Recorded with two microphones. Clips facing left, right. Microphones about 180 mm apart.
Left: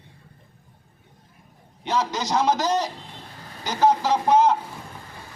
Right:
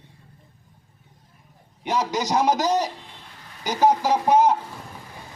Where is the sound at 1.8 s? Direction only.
15° right (ahead or behind).